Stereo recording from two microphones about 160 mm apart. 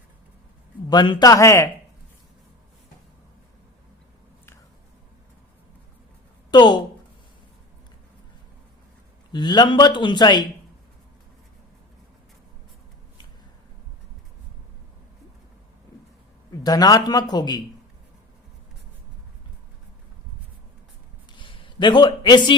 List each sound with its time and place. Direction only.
0.9 s a man's voice: 25° left (ahead or behind)
6.5 s speech: 30° left (ahead or behind)
9.3 s a man's voice: 25° left (ahead or behind)
16.5 s a man's voice: 25° left (ahead or behind)
21.3 s a man's voice: 30° left (ahead or behind)